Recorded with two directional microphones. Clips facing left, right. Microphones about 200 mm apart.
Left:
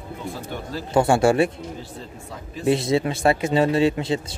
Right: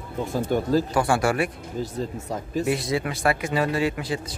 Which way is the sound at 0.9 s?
25° left (ahead or behind).